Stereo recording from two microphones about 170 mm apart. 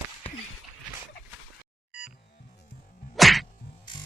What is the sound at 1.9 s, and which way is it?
Music, 5° right (ahead or behind).